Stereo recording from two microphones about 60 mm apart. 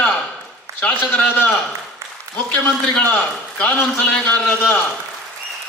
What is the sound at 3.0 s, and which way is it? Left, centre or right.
A man's voice, left.